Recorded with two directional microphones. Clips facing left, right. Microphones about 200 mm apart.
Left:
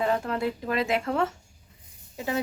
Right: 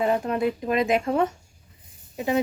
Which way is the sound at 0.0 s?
20° right (ahead or behind).